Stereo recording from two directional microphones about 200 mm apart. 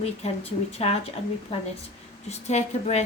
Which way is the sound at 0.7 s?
30° left (ahead or behind).